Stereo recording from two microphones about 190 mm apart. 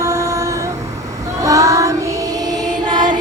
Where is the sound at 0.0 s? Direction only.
15° right (ahead or behind).